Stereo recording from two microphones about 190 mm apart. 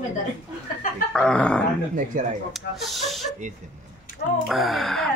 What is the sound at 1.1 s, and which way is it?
Speech, 5° left (ahead or behind).